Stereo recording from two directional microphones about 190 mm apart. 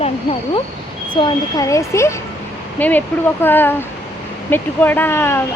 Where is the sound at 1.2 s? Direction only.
15° left (ahead or behind).